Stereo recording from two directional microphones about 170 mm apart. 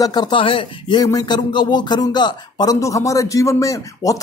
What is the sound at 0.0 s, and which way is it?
Speech, 25° left (ahead or behind).